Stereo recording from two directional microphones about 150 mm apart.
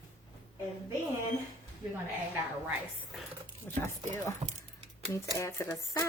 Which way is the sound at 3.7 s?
20° left (ahead or behind).